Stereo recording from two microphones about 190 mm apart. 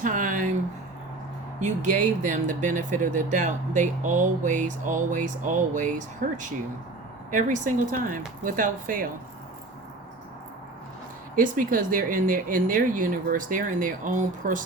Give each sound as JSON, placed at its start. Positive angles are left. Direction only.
{"t": 0.0, "sound": "a sound", "side_deg": -45}
{"t": 1.5, "sound": "speech", "side_deg": -40}
{"t": 11.3, "sound": "speech", "side_deg": -45}